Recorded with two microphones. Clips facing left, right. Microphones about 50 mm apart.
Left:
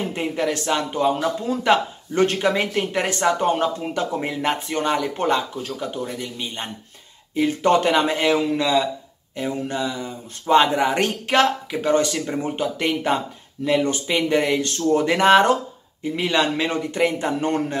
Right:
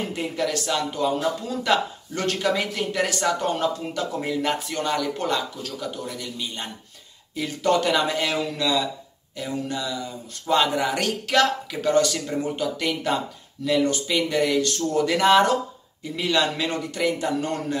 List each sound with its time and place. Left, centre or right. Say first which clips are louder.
0.1 s a man's voice: left 3 dB; left